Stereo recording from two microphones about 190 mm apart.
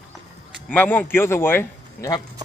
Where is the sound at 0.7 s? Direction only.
10° left (ahead or behind).